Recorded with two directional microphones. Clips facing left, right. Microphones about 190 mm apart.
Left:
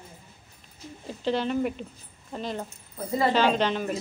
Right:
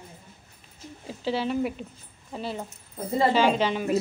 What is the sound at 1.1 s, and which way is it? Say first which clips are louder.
Speech: left 1 dB; 5° right (ahead or behind).